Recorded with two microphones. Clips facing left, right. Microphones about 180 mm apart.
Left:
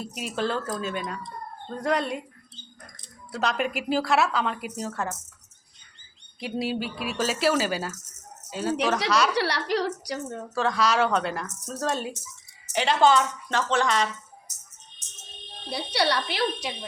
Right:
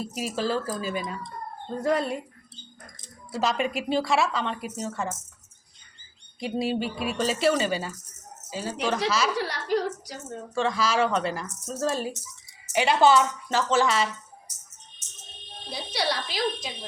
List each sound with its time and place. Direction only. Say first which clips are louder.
0.0 s a woman's voice: even; centre (ahead or behind)
3.3 s a woman's voice: right 1 dB; centre (ahead or behind)
6.4 s a woman's voice: right 2 dB; 5° left (ahead or behind)
9.3 s a woman's voice: left 1 dB; 80° left
10.5 s a woman's voice: left 1 dB; centre (ahead or behind)
15.7 s a woman's voice: left 3 dB; 65° left (ahead or behind)